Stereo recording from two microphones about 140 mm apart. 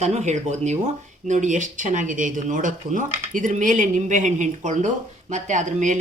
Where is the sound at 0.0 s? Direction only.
55° right (ahead or behind).